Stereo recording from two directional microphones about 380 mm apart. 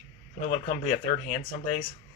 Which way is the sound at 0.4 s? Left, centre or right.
Centre.